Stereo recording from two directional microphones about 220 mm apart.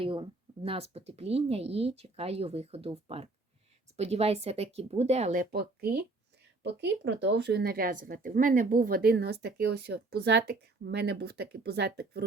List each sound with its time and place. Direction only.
0.0 s a woman's voice: 25° right (ahead or behind); by 12.2 s 45° right (ahead or behind)